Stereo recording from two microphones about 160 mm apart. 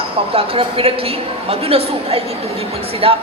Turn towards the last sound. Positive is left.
turn(degrees=-35)  # may be behind; listen again after turning